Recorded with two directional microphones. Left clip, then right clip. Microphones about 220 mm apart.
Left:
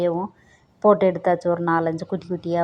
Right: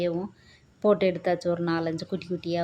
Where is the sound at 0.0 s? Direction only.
5° left (ahead or behind).